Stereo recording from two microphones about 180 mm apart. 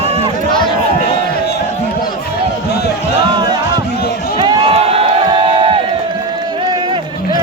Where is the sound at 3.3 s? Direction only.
25° right (ahead or behind).